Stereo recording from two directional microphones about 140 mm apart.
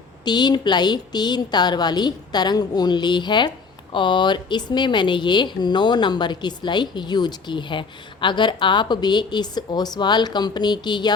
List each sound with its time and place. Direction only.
0.3 s speech: 30° left (ahead or behind)